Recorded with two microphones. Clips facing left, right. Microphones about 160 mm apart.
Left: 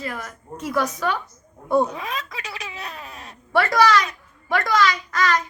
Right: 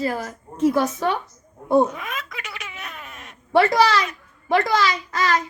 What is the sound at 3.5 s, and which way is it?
Speech, 25° right (ahead or behind).